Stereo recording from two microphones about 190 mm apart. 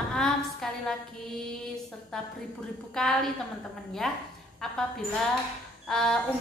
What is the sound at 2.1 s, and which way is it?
A woman's voice, 5° left (ahead or behind).